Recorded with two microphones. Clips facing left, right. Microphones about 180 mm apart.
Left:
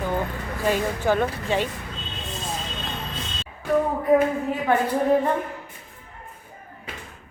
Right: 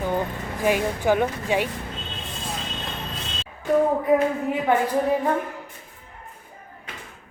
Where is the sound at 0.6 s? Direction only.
10° right (ahead or behind).